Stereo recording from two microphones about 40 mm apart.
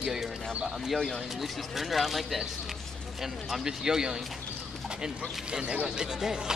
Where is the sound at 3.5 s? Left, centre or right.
Centre.